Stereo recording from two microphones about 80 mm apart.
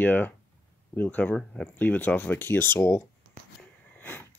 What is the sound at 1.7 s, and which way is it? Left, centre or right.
Speech, left.